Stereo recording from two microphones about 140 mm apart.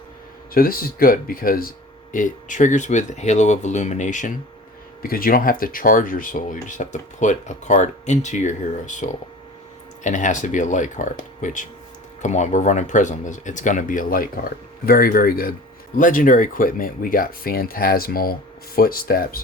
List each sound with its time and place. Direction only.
0.5 s speech: 90° left
2.1 s speech: 65° left (ahead or behind)
5.0 s speech: 90° left
16.0 s speech: 70° left (ahead or behind); by 19.4 s 90° left